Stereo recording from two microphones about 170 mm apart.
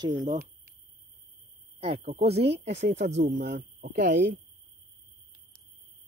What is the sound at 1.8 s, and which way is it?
Speech, 35° right (ahead or behind).